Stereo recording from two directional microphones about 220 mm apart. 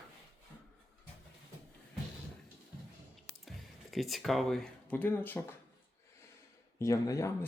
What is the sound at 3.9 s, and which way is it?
Speech, centre (ahead or behind).